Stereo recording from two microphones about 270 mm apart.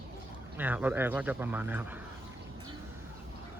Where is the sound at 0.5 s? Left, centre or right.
Centre.